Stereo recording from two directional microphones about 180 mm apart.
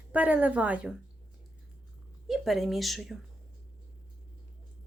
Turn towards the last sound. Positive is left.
turn(degrees=0)  # may be behind; listen again after turning